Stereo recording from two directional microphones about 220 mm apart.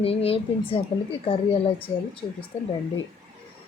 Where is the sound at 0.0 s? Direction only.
25° left (ahead or behind).